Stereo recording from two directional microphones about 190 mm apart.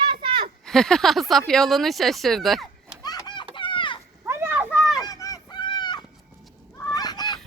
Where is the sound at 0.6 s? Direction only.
Centre (ahead or behind).